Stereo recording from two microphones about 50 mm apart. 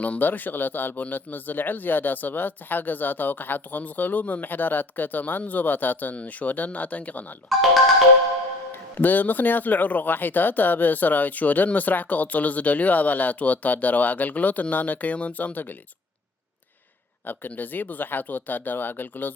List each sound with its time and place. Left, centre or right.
0.2 s a man's voice: left
8.7 s a man's voice: left
17.2 s a man's voice: left